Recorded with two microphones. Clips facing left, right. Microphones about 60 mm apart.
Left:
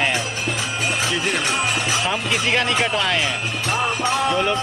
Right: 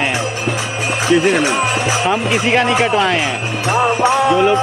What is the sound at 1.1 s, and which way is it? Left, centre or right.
Music, right.